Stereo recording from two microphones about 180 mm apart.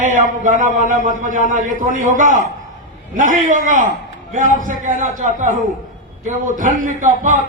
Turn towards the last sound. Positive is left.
turn(degrees=-45)  # may be behind; listen again after turning